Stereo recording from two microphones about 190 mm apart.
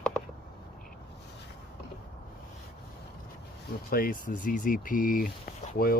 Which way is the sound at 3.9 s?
50° left (ahead or behind).